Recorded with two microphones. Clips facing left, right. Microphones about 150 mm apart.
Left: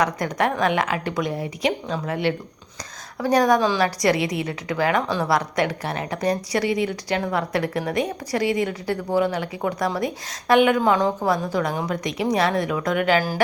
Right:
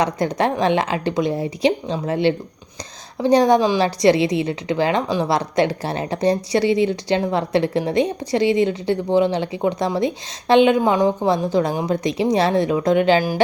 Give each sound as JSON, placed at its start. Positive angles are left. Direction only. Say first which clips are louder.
{"t": 0.0, "sound": "a woman's voice", "louder": "right 3 dB", "side_deg": -25}